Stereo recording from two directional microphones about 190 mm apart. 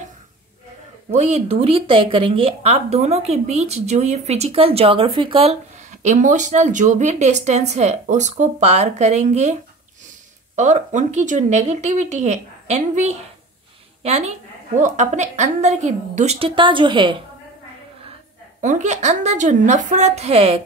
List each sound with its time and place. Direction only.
1.1 s speech: 35° right (ahead or behind)
18.6 s speech: 40° right (ahead or behind)